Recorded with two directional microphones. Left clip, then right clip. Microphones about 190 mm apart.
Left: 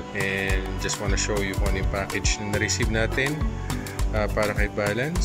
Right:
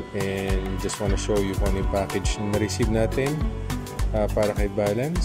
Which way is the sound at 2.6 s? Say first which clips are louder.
Right 1 dB; 15° right (ahead or behind).